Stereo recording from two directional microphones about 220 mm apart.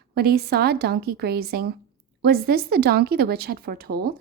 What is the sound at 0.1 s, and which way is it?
Speech, 45° right (ahead or behind).